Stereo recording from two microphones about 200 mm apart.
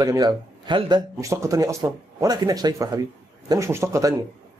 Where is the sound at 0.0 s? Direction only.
20° right (ahead or behind).